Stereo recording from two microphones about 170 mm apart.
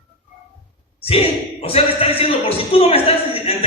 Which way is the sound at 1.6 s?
35° left (ahead or behind).